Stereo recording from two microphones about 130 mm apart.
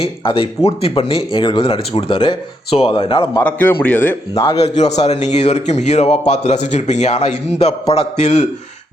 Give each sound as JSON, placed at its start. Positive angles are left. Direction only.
{"t": 0.0, "sound": "speech", "side_deg": 45}
{"t": 3.4, "sound": "a man's voice", "side_deg": 10}
{"t": 4.6, "sound": "a man's voice", "side_deg": 60}